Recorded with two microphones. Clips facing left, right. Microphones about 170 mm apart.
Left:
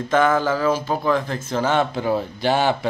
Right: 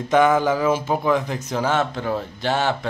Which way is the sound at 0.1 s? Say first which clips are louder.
Right 2 dB; 15° right (ahead or behind).